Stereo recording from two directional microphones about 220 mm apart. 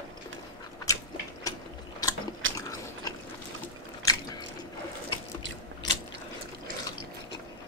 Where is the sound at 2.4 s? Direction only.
60° right (ahead or behind).